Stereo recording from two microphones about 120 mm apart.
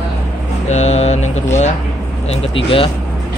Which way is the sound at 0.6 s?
65° left (ahead or behind).